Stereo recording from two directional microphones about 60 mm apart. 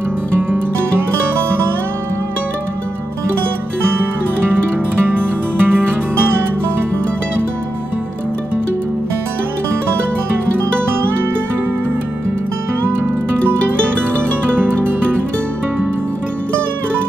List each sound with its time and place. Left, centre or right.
5.0 s music: right